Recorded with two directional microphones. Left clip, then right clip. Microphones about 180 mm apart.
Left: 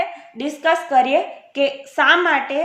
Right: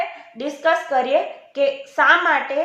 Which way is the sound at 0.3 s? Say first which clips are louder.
Left 1 dB; 30° left (ahead or behind).